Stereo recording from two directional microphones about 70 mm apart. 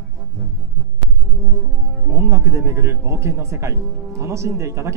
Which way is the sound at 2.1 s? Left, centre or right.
Right.